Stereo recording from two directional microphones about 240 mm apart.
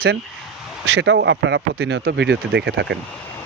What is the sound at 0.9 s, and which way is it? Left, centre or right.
Speech, right.